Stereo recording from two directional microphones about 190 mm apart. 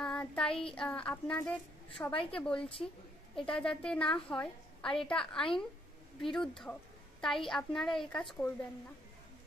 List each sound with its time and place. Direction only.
0.0 s child singing: 5° left (ahead or behind)
0.7 s a woman's voice: 5° left (ahead or behind)